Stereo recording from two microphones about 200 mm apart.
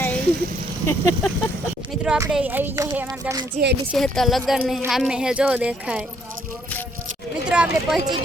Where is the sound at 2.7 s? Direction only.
15° right (ahead or behind).